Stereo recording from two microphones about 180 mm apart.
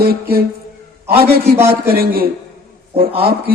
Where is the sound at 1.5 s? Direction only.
15° right (ahead or behind).